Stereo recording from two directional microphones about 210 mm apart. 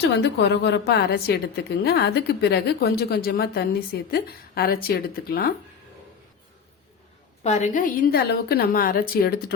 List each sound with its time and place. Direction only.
0.2 s a woman's voice: 55° left (ahead or behind)
7.4 s a woman's voice: 35° left (ahead or behind)